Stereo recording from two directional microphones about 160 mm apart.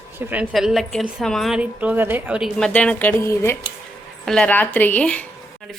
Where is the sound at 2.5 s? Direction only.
5° left (ahead or behind).